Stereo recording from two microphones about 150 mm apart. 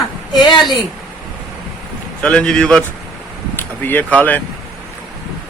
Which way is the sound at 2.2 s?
5° left (ahead or behind).